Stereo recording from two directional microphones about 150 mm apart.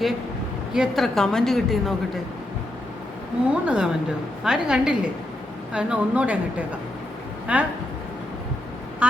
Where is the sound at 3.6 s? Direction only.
5° right (ahead or behind).